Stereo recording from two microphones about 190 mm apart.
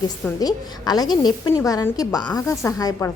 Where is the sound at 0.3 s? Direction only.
20° left (ahead or behind).